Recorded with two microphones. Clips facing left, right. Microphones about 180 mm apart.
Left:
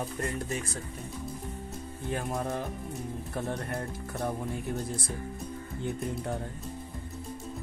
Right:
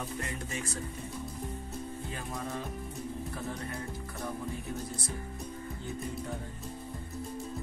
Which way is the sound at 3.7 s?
60° left (ahead or behind).